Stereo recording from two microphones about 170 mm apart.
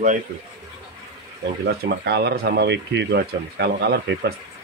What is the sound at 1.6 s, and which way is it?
Speech, 75° right (ahead or behind).